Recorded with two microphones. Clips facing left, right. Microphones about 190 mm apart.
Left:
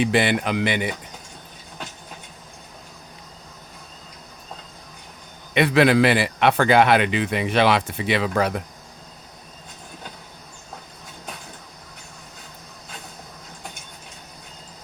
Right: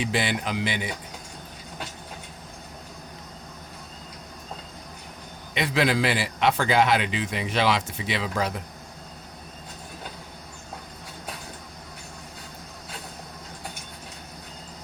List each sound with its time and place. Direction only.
0.0 s a man's voice: 60° left (ahead or behind)
5.5 s a man's voice: 60° left (ahead or behind)